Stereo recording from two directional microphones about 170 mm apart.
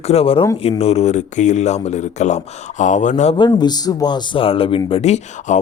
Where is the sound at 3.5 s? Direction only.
25° left (ahead or behind); by 5.5 s 40° left (ahead or behind).